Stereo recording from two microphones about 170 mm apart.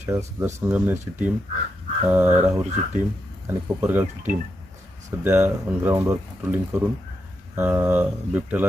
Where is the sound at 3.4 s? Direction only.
15° right (ahead or behind).